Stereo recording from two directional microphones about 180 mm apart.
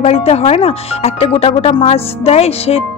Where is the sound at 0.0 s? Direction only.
35° left (ahead or behind).